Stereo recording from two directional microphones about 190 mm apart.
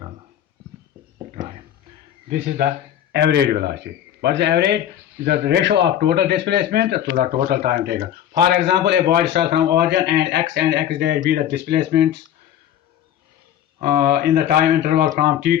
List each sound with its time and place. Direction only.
3.1 s speech: 60° right (ahead or behind)
13.8 s speech: 55° right (ahead or behind)